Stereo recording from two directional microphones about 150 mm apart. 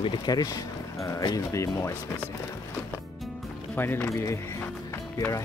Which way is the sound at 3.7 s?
15° left (ahead or behind).